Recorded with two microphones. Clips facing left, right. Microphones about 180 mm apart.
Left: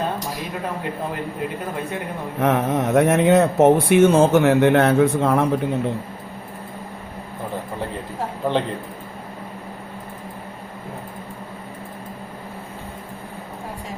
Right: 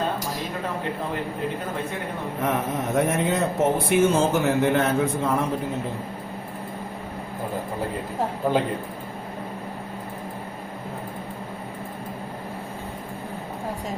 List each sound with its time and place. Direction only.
2.4 s speech: 75° left (ahead or behind)